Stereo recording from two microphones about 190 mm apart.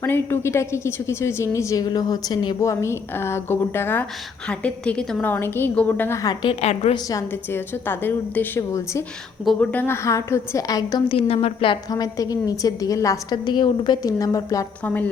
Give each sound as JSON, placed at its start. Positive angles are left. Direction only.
{"t": 0.0, "sound": "a woman's voice", "side_deg": 10}
{"t": 6.4, "sound": "a woman's voice", "side_deg": 30}
{"t": 7.1, "sound": "a woman's voice", "side_deg": 15}
{"t": 9.4, "sound": "a woman's voice", "side_deg": 5}